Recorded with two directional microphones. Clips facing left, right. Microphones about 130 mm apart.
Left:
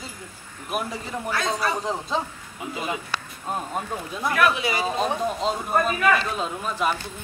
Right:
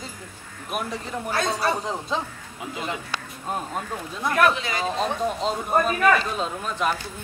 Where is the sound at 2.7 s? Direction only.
5° left (ahead or behind).